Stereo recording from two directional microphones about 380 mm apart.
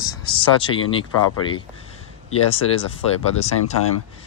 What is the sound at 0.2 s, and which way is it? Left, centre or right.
Speech, centre.